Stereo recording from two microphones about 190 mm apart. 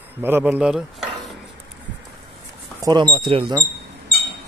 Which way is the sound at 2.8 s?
25° right (ahead or behind).